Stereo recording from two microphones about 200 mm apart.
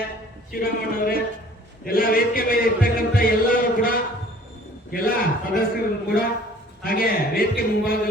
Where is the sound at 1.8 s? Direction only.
45° left (ahead or behind).